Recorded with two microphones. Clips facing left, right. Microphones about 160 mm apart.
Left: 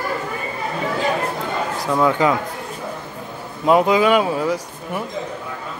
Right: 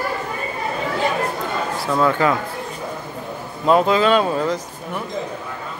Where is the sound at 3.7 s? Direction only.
15° left (ahead or behind).